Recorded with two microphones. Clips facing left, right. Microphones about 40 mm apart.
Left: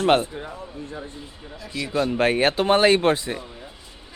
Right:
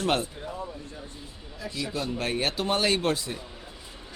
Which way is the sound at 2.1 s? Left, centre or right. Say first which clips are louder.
Left 10 dB; left.